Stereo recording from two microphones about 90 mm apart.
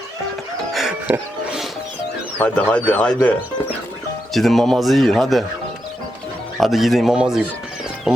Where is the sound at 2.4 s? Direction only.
15° left (ahead or behind).